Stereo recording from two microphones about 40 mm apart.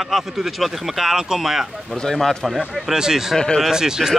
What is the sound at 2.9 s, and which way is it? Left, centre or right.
Speech, centre.